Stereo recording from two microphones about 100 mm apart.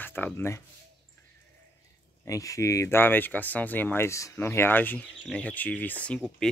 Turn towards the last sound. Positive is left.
turn(degrees=15)  # may be behind; listen again after turning